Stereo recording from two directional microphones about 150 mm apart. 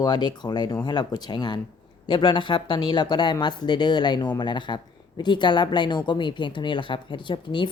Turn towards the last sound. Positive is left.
turn(degrees=30)  # may be behind; listen again after turning